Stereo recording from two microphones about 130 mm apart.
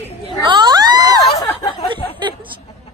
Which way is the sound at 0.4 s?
35° right (ahead or behind).